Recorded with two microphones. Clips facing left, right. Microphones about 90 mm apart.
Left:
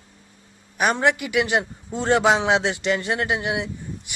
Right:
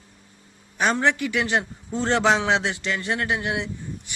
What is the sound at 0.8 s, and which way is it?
A man's voice, 15° left (ahead or behind).